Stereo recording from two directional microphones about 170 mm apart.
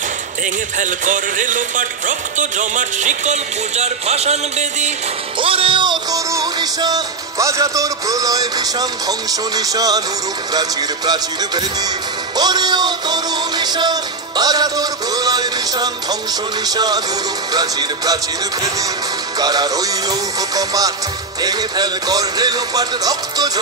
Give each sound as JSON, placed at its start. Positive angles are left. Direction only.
{"t": 0.7, "sound": "speech", "side_deg": -50}
{"t": 5.4, "sound": "music", "side_deg": -30}
{"t": 10.5, "sound": "speech", "side_deg": -20}
{"t": 12.4, "sound": "music", "side_deg": -25}
{"t": 16.6, "sound": "speech", "side_deg": -20}
{"t": 19.3, "sound": "speech", "side_deg": -20}